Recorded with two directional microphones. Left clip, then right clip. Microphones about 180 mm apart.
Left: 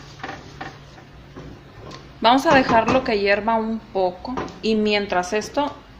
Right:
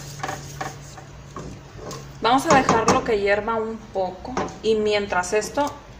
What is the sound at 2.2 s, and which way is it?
A woman's voice, 55° left (ahead or behind).